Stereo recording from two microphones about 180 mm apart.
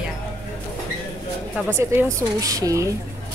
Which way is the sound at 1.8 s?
15° right (ahead or behind).